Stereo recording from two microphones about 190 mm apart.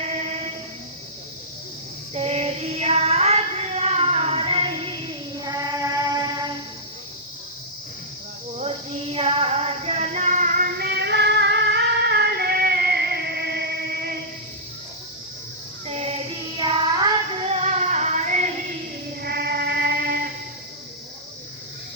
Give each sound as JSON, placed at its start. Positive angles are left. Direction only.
{"t": 0.0, "sound": "train", "side_deg": -35}
{"t": 2.1, "sound": "child singing", "side_deg": -35}
{"t": 8.5, "sound": "music", "side_deg": -35}
{"t": 15.9, "sound": "child singing", "side_deg": -35}
{"t": 16.6, "sound": "child singing", "side_deg": -20}
{"t": 17.5, "sound": "music", "side_deg": -35}
{"t": 19.2, "sound": "music", "side_deg": -55}